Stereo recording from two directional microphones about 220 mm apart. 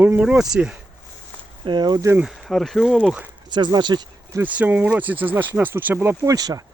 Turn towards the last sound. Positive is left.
turn(degrees=-15)  # may be behind; listen again after turning